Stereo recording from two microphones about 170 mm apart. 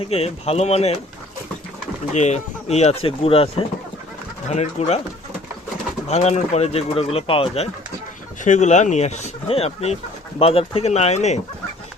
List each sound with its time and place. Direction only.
0.0 s speech: 35° left (ahead or behind)
2.1 s speech: 40° left (ahead or behind)
6.1 s speech: 40° left (ahead or behind)